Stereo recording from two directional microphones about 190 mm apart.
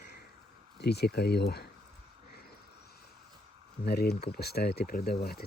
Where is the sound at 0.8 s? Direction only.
60° left (ahead or behind).